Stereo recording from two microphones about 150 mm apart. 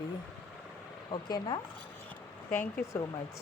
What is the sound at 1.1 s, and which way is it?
Speech, 30° left (ahead or behind).